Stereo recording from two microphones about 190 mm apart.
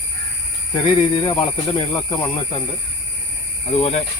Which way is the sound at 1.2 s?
25° left (ahead or behind).